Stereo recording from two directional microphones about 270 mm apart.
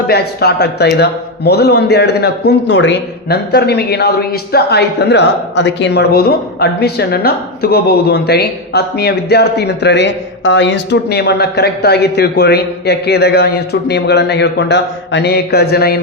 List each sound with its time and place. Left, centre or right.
0.1 s a man's voice: left